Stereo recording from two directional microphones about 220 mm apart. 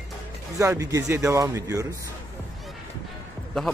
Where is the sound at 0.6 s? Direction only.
15° right (ahead or behind).